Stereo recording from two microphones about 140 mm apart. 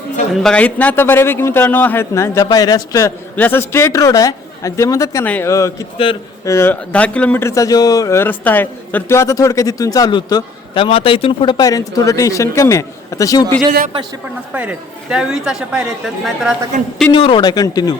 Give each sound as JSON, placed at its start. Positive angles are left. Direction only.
{"t": 0.4, "sound": "a man's voice", "side_deg": 10}
{"t": 3.3, "sound": "speech", "side_deg": 15}
{"t": 5.2, "sound": "a man's voice", "side_deg": 10}
{"t": 5.5, "sound": "speech", "side_deg": 20}
{"t": 10.8, "sound": "speech", "side_deg": 40}
{"t": 14.5, "sound": "a woman's voice", "side_deg": -10}
{"t": 17.1, "sound": "speech", "side_deg": 40}